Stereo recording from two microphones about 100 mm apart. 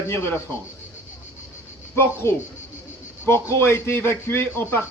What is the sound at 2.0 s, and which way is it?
A man's voice, 25° left (ahead or behind).